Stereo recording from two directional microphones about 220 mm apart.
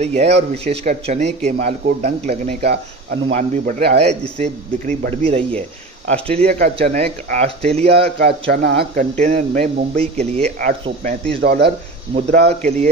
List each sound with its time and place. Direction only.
0.0 s speech: 30° right (ahead or behind)
2.6 s speech: 45° right (ahead or behind)
3.3 s speech: 35° right (ahead or behind)
6.6 s speech: 45° right (ahead or behind)
7.0 s speech: 30° right (ahead or behind)
7.9 s speech: 45° right (ahead or behind)
11.4 s speech: 50° right (ahead or behind)
12.1 s speech: 25° right (ahead or behind)